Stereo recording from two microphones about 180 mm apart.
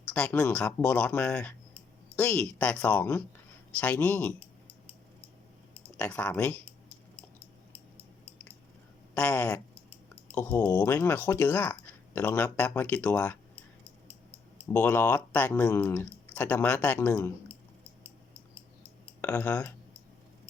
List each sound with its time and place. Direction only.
0.1 s speech: 5° left (ahead or behind)
6.0 s speech: 5° left (ahead or behind)
9.1 s speech: 10° left (ahead or behind)
14.7 s speech: 10° left (ahead or behind)
19.5 s speech: 20° left (ahead or behind)